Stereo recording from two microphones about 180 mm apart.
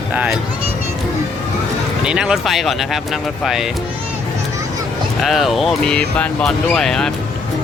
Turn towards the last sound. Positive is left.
turn(degrees=5)  # may be behind; listen again after turning